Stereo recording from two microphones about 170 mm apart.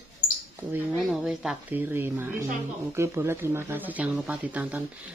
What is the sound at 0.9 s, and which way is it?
Speech, centre (ahead or behind).